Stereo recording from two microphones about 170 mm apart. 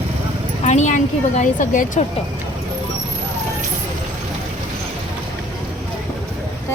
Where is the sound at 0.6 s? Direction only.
45° left (ahead or behind).